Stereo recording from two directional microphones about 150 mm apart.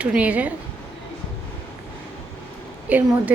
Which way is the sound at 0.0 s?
10° right (ahead or behind).